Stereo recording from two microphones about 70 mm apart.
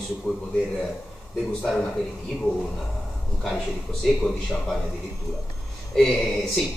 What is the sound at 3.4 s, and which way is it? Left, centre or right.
A man's voice, centre.